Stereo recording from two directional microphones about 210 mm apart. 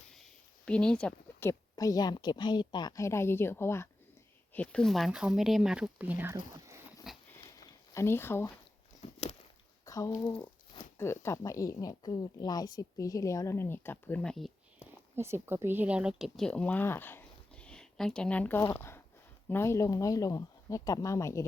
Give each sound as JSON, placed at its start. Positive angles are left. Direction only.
{"t": 0.2, "sound": "speech", "side_deg": 5}
{"t": 7.1, "sound": "a sound", "side_deg": 0}
{"t": 7.9, "sound": "speech", "side_deg": 10}
{"t": 9.8, "sound": "speech", "side_deg": 15}
{"t": 15.1, "sound": "speech", "side_deg": -10}